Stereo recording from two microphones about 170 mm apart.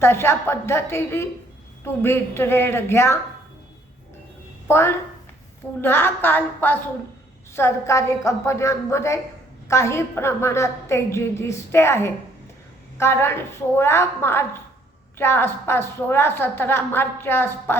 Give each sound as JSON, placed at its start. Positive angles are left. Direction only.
{"t": 0.0, "sound": "a woman's voice", "side_deg": 15}
{"t": 4.7, "sound": "a woman's voice", "side_deg": 15}